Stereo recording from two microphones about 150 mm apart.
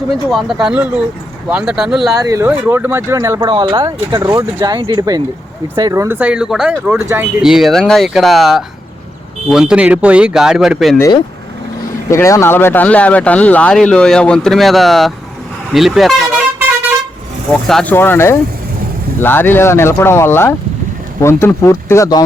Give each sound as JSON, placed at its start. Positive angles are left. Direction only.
{"t": 0.3, "sound": "speech", "side_deg": 0}
{"t": 2.1, "sound": "speech", "side_deg": -25}
{"t": 3.5, "sound": "speech", "side_deg": -35}
{"t": 7.0, "sound": "speech", "side_deg": -20}
{"t": 7.4, "sound": "speech", "side_deg": -5}
{"t": 12.1, "sound": "speech", "side_deg": 20}
{"t": 17.5, "sound": "speech", "side_deg": 5}